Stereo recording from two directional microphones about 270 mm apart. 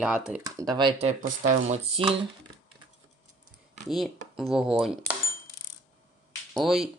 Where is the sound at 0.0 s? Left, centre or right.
Centre; by 2.1 s right.